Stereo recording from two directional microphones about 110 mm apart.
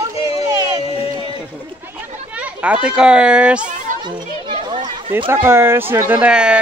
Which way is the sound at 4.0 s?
45° right (ahead or behind).